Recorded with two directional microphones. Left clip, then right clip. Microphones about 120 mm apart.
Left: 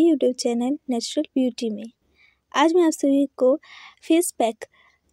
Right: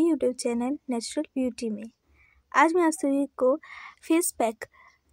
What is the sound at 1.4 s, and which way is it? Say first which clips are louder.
A woman's voice: left 6 dB; 45° left (ahead or behind).